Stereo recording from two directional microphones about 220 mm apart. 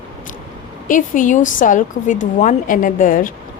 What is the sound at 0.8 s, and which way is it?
A woman's voice, 35° left (ahead or behind).